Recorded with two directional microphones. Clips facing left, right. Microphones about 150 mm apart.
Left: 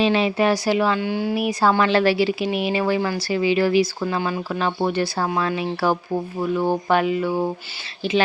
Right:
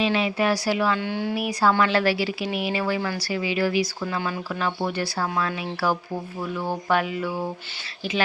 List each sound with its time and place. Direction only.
0.0 s speech: 30° left (ahead or behind)